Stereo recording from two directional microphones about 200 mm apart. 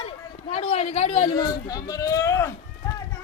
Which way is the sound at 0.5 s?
35° left (ahead or behind).